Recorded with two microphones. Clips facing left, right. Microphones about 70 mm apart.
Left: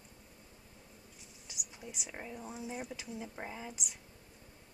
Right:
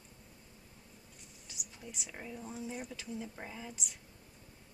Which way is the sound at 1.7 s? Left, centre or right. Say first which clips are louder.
Left 1 dB; centre.